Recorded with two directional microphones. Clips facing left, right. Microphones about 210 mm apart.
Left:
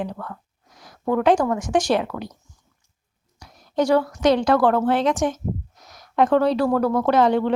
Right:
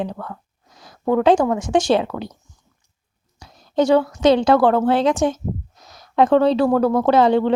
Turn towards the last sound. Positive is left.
turn(degrees=-30)  # may be behind; listen again after turning